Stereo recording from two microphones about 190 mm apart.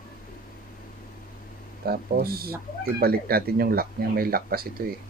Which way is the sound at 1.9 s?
55° right (ahead or behind).